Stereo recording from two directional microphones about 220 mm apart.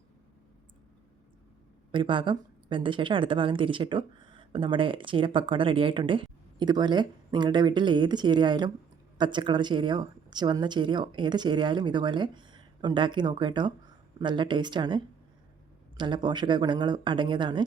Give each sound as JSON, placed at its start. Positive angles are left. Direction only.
{"t": 1.9, "sound": "a woman's voice", "side_deg": -20}